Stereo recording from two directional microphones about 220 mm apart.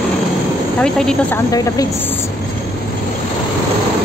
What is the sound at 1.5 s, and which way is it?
Speech, 15° left (ahead or behind).